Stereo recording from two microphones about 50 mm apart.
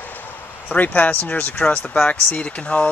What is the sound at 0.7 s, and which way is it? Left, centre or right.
Speech, left.